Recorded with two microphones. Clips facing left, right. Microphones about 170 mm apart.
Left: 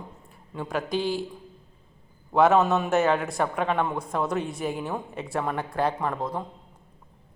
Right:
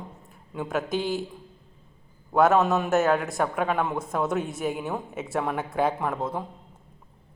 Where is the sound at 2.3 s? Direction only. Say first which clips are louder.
Even; centre (ahead or behind).